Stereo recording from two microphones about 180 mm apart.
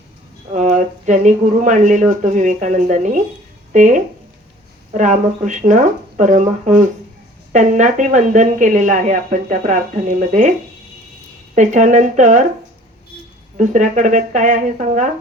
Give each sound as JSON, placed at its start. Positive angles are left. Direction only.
{"t": 0.5, "sound": "speech", "side_deg": -40}
{"t": 11.5, "sound": "speech", "side_deg": -45}
{"t": 13.6, "sound": "speech", "side_deg": -45}